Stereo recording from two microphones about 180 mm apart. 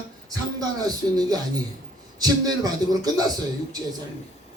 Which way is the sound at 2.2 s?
20° right (ahead or behind).